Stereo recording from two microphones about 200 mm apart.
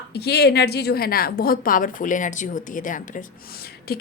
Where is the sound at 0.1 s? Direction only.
55° left (ahead or behind).